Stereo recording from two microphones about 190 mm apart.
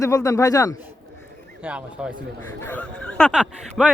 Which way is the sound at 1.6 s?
5° right (ahead or behind).